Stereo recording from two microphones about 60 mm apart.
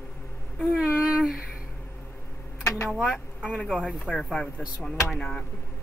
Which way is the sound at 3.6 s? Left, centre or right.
Centre.